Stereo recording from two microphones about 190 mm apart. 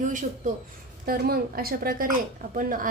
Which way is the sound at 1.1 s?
50° right (ahead or behind).